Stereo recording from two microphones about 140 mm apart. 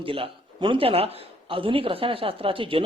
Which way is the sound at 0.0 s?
40° right (ahead or behind).